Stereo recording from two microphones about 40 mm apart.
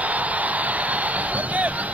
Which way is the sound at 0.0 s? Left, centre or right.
Right.